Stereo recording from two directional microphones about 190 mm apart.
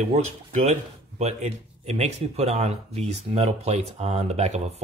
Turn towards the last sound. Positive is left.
turn(degrees=-35)  # may be behind; listen again after turning